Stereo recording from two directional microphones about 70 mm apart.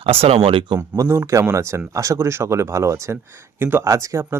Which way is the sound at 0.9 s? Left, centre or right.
Right.